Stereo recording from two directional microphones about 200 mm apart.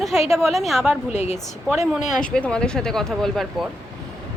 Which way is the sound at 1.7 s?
5° right (ahead or behind).